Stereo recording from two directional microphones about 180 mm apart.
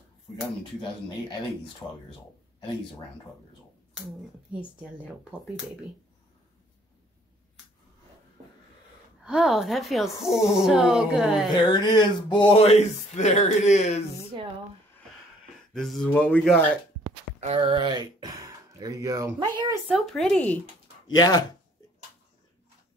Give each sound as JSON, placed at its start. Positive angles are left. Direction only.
{"t": 1.8, "sound": "speech", "side_deg": 10}
{"t": 4.5, "sound": "speech", "side_deg": -5}
{"t": 9.2, "sound": "speech", "side_deg": 0}
{"t": 11.6, "sound": "speech", "side_deg": 25}
{"t": 15.7, "sound": "speech", "side_deg": 0}
{"t": 17.4, "sound": "speech", "side_deg": -30}
{"t": 19.9, "sound": "speech", "side_deg": 0}
{"t": 21.1, "sound": "speech", "side_deg": 20}